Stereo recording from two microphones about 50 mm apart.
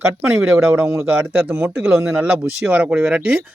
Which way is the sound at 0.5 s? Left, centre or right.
Right.